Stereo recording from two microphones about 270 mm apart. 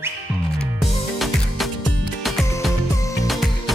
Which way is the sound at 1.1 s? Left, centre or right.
Centre.